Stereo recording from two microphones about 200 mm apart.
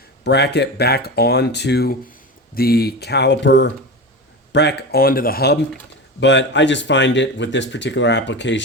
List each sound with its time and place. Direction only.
0.3 s speech: 55° left (ahead or behind)
6.1 s speech: 60° left (ahead or behind)